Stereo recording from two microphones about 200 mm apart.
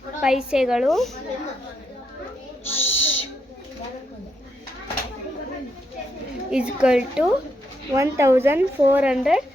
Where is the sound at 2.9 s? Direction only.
70° left (ahead or behind).